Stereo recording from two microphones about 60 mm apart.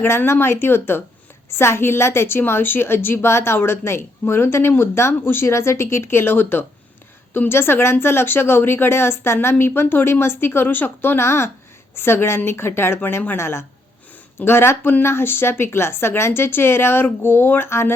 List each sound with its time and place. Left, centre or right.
0.0 s a woman's voice: left